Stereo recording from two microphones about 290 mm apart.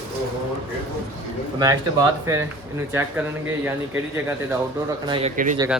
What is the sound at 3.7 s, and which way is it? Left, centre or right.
Speech, centre.